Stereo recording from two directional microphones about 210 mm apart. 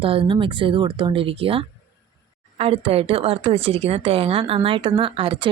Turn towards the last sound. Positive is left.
turn(degrees=-25)  # may be behind; listen again after turning